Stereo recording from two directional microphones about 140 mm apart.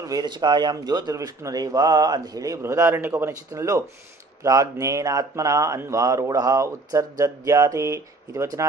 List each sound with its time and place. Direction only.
0.0 s speech: 30° right (ahead or behind)